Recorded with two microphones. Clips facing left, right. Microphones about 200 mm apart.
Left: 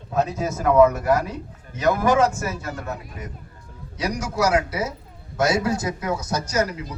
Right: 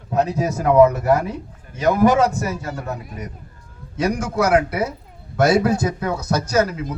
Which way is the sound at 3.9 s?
55° right (ahead or behind).